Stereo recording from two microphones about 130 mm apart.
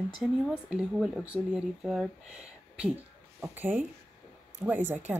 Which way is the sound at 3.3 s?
15° right (ahead or behind).